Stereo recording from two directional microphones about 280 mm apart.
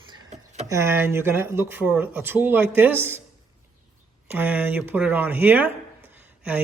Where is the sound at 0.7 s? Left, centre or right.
Centre.